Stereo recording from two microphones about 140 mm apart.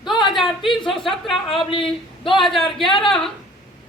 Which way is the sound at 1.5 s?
40° left (ahead or behind).